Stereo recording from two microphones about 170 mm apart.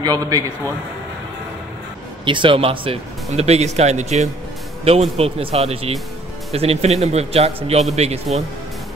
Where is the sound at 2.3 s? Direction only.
30° right (ahead or behind).